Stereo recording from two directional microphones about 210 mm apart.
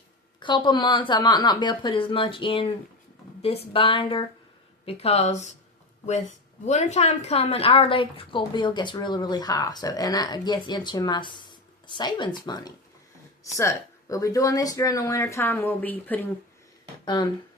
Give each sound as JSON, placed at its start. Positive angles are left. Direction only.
{"t": 0.3, "sound": "a woman's voice", "side_deg": 20}
{"t": 6.7, "sound": "a woman's voice", "side_deg": 35}